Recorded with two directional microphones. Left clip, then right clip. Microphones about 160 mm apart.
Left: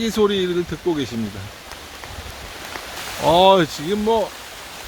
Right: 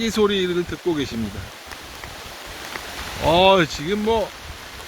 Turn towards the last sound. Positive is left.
turn(degrees=15)  # may be behind; listen again after turning